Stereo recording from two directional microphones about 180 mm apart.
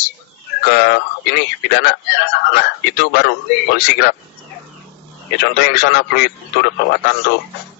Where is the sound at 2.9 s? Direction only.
65° left (ahead or behind).